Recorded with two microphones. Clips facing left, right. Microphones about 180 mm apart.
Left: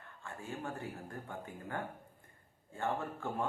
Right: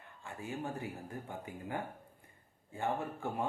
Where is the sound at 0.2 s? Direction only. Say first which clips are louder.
Right 2 dB; 15° right (ahead or behind).